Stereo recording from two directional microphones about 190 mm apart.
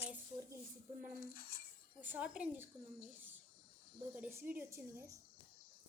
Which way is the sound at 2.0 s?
10° right (ahead or behind).